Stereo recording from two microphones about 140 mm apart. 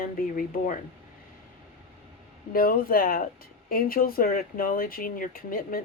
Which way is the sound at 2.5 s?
90° left.